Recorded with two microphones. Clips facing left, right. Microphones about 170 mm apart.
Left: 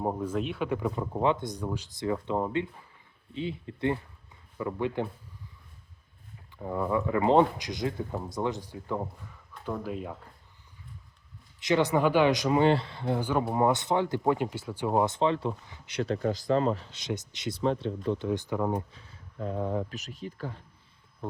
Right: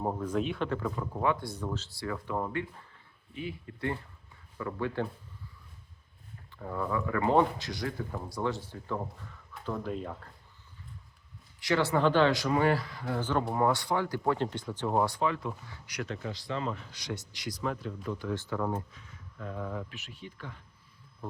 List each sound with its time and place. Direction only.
0.0 s speech: 10° left (ahead or behind)
0.7 s speech: 15° left (ahead or behind)
6.6 s speech: 20° left (ahead or behind)
11.6 s speech: 20° left (ahead or behind)
13.1 s speech: 10° left (ahead or behind); by 16.8 s 40° left (ahead or behind)
16.9 s speech: 20° left (ahead or behind)
18.9 s speech: 30° left (ahead or behind)